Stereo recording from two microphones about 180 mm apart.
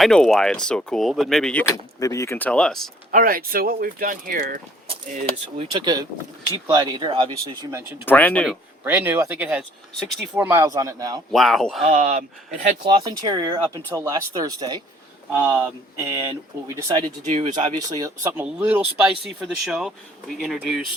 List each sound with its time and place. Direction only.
0.0 s speech: 5° left (ahead or behind)
1.6 s speech: 15° left (ahead or behind)
3.1 s speech: 50° right (ahead or behind)
4.9 s speech: 35° right (ahead or behind)
5.7 s speech: 20° right (ahead or behind)
8.0 s speech: 10° left (ahead or behind)
8.8 s speech: 10° right (ahead or behind)
11.3 s speech: centre (ahead or behind)
11.8 s speech: 40° right (ahead or behind)
12.9 s speech: 20° right (ahead or behind)
17.2 s speech: 35° right (ahead or behind)
17.8 s speech: 20° right (ahead or behind); by 20.8 s centre (ahead or behind)